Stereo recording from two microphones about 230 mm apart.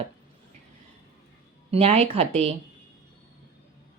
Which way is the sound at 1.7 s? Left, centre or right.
Right.